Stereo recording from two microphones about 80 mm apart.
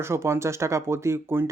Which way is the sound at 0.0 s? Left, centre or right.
Right.